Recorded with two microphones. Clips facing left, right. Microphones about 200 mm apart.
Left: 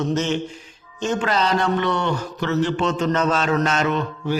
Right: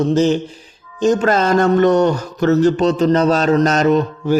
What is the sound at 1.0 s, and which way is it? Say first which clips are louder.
Speech: right 7 dB; 40° right (ahead or behind).